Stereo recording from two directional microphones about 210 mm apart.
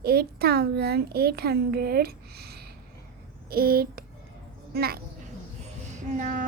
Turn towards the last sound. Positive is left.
turn(degrees=-35)  # may be behind; listen again after turning